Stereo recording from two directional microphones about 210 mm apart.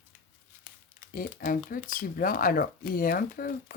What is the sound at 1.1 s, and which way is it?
Speech, 45° left (ahead or behind).